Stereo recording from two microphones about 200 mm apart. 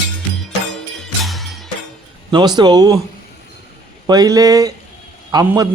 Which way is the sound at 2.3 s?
20° right (ahead or behind).